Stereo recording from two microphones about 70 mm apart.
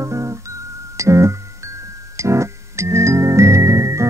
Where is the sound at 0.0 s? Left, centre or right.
Right.